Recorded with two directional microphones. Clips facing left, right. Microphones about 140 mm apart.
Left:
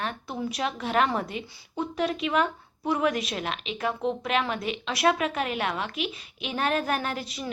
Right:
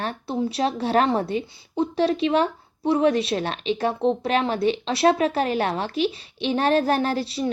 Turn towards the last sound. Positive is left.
turn(degrees=-30)  # may be behind; listen again after turning